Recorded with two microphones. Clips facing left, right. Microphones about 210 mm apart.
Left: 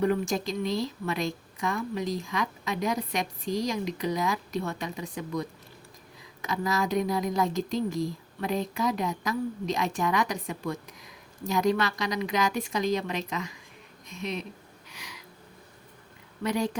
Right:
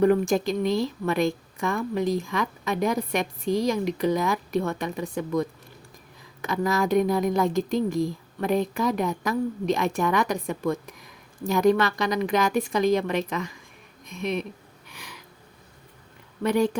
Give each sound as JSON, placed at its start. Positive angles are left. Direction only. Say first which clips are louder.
{"t": 0.0, "sound": "a woman's voice", "louder": "right 6 dB", "side_deg": -55}
{"t": 14.8, "sound": "a sound", "louder": "right 3 dB", "side_deg": -55}
{"t": 16.4, "sound": "a woman's voice", "louder": "right 6 dB", "side_deg": -55}